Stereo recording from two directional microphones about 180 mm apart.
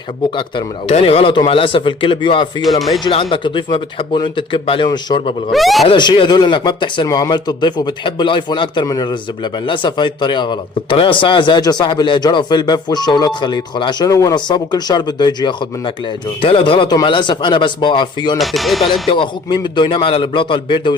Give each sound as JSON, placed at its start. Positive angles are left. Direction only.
{"t": 0.3, "sound": "speech", "side_deg": 30}
{"t": 5.5, "sound": "speech", "side_deg": 0}
{"t": 5.9, "sound": "speech", "side_deg": 25}
{"t": 18.3, "sound": "speech", "side_deg": 0}
{"t": 19.0, "sound": "speech", "side_deg": 25}